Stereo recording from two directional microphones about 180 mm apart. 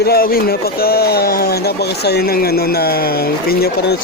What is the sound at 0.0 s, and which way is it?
Speech, 60° left (ahead or behind).